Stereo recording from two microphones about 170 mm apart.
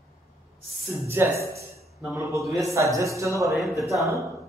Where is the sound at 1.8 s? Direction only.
Centre (ahead or behind).